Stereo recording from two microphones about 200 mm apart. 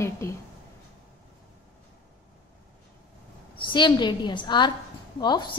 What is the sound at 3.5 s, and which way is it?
A woman's voice, 20° left (ahead or behind).